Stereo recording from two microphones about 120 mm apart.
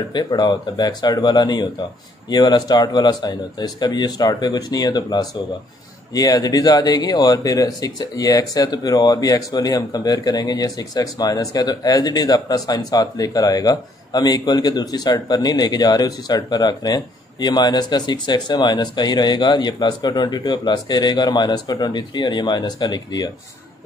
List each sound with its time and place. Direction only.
0.1 s speech: 35° left (ahead or behind)